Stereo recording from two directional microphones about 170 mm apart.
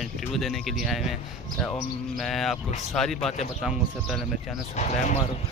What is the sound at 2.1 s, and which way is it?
Speech, centre (ahead or behind).